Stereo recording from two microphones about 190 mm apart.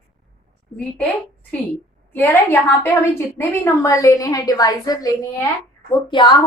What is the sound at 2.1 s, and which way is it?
A woman's voice, 10° left (ahead or behind).